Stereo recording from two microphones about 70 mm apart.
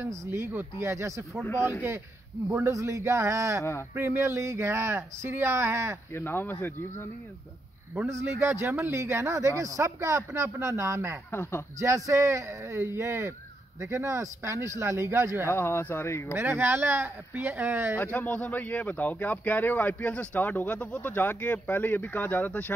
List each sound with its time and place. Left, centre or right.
0.2 s speech: right
2.5 s speech: right
6.1 s speech: left
8.1 s speech: right
15.5 s speech: left
16.3 s speech: right
17.9 s speech: left